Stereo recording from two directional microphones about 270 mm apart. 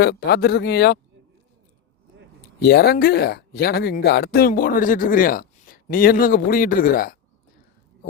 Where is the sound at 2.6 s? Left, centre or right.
Left.